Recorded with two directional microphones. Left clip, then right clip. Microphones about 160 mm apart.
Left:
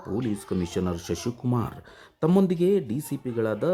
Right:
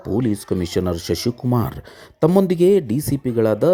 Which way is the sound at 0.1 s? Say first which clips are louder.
Right 8 dB; 25° right (ahead or behind).